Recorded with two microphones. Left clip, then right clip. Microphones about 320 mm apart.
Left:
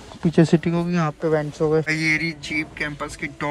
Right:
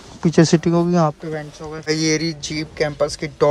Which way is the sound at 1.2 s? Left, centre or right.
Centre.